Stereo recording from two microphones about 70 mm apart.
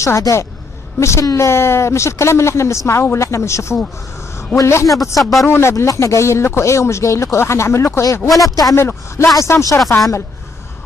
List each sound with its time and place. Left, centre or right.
0.9 s a woman's voice: left
5.2 s speech: centre
5.5 s a woman's voice: left
8.7 s a man's voice: left